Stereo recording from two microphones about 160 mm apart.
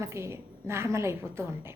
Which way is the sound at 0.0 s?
15° right (ahead or behind).